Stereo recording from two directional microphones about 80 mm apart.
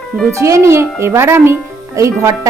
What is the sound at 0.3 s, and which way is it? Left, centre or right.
Speech, right.